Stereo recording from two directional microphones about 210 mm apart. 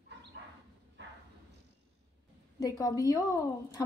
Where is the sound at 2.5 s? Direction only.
15° left (ahead or behind).